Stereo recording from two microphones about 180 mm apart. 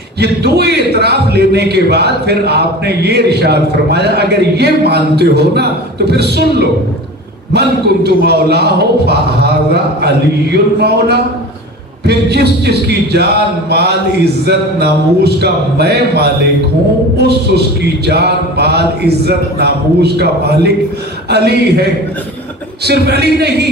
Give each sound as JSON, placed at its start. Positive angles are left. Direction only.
{"t": 0.2, "sound": "a man's voice", "side_deg": -65}